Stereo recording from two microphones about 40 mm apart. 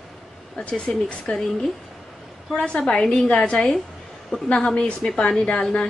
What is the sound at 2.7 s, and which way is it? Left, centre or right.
Speech, centre.